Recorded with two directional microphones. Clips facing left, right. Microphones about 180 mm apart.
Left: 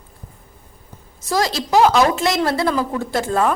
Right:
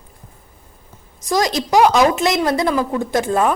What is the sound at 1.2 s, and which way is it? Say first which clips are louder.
A woman's voice: right 2 dB; 15° right (ahead or behind).